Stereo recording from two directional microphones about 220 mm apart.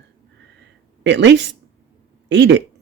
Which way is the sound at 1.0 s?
55° right (ahead or behind).